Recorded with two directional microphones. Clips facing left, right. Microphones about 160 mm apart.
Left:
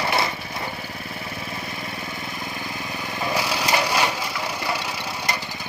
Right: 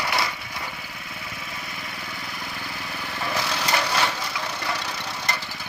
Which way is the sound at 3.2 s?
15° left (ahead or behind).